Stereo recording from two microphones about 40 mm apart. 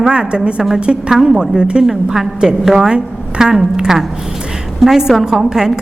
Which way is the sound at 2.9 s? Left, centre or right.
Centre.